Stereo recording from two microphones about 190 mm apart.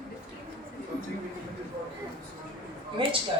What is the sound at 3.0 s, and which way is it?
Speech, 25° right (ahead or behind).